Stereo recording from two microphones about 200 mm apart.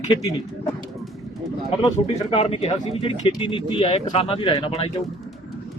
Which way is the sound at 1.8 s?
30° left (ahead or behind).